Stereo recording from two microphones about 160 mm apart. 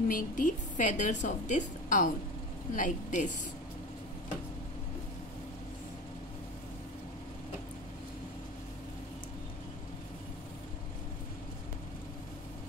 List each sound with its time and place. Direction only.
0.1 s a woman's voice: 55° left (ahead or behind)